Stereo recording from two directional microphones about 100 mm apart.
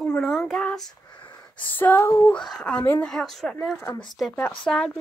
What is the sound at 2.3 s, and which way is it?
Speech, 5° left (ahead or behind).